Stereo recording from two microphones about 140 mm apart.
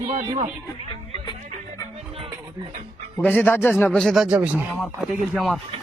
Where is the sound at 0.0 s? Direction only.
45° right (ahead or behind).